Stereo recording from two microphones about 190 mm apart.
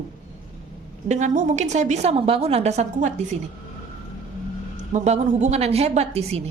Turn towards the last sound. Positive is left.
turn(degrees=-35)  # may be behind; listen again after turning